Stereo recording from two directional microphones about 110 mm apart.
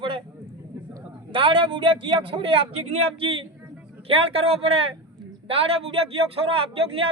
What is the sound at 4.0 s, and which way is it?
Speech, 60° right (ahead or behind).